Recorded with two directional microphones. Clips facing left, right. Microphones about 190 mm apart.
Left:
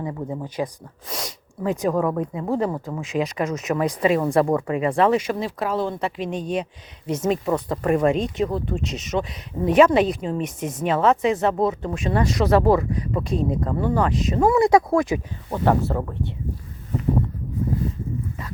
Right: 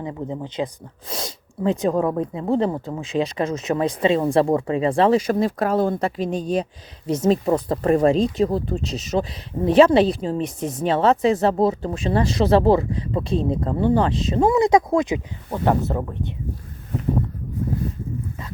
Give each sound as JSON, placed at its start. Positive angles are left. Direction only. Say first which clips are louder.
{"t": 0.0, "sound": "a woman's voice", "louder": "even", "side_deg": -20}